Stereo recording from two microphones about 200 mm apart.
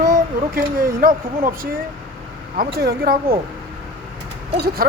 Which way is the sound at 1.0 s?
45° right (ahead or behind).